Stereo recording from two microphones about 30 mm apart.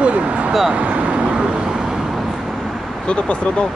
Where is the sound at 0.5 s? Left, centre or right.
Centre.